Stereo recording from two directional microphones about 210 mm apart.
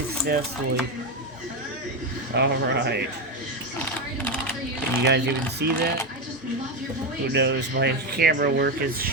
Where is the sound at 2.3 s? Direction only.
55° right (ahead or behind).